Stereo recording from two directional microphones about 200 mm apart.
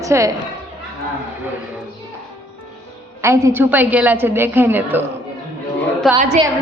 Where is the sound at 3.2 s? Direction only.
10° right (ahead or behind).